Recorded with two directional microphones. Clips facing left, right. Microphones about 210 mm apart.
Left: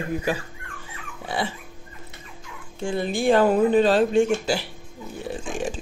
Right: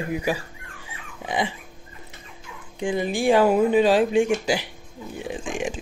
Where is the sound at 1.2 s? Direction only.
15° right (ahead or behind).